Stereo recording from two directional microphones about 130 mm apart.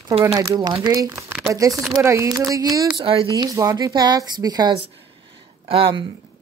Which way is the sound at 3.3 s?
25° right (ahead or behind).